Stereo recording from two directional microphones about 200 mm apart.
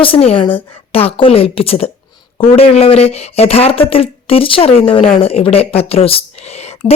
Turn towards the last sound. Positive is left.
turn(degrees=30)  # may be behind; listen again after turning